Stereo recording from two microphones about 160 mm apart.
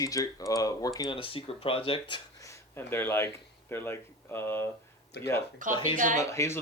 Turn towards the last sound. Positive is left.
turn(degrees=15)  # may be behind; listen again after turning